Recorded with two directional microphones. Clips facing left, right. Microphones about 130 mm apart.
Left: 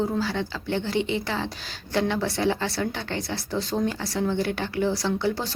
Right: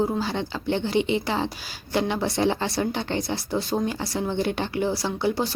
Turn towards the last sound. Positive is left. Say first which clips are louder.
# right 1 dB
turn(degrees=-15)  # may be behind; listen again after turning